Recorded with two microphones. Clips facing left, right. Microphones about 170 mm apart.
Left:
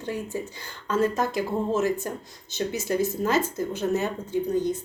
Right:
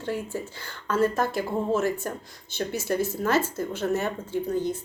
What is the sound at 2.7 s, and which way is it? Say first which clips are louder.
Speech: left 1 dB; 15° left (ahead or behind).